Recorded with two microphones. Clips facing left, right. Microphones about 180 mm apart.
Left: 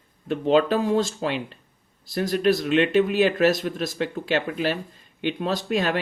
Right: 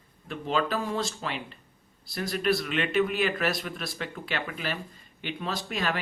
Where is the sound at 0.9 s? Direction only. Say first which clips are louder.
Left 8 dB; 45° left (ahead or behind).